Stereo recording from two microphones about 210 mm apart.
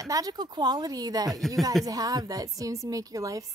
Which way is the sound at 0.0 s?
15° right (ahead or behind).